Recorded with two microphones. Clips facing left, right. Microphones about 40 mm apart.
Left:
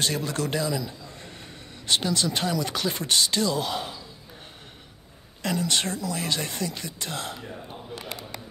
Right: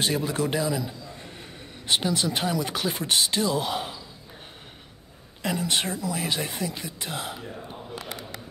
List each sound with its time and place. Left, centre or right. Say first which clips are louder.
0.0 s a man's voice: right 2 dB; centre
5.4 s speech: even; centre